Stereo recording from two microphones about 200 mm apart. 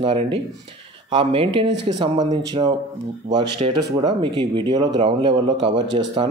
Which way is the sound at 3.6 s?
30° right (ahead or behind).